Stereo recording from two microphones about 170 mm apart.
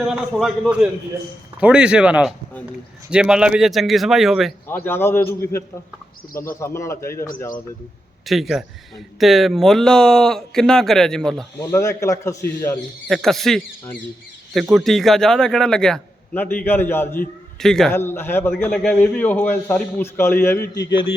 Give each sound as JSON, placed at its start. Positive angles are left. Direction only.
{"t": 0.1, "sound": "a man's voice", "side_deg": 0}
{"t": 4.7, "sound": "a man's voice", "side_deg": 10}
{"t": 8.3, "sound": "a man's voice", "side_deg": 0}
{"t": 11.6, "sound": "a man's voice", "side_deg": 15}
{"t": 13.1, "sound": "a man's voice", "side_deg": 0}
{"t": 17.6, "sound": "a man's voice", "side_deg": 5}